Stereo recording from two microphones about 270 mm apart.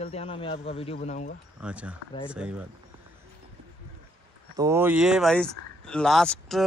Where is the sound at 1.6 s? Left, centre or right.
Centre.